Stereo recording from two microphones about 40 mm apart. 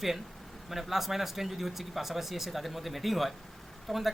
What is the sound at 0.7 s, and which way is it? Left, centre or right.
Speech, centre.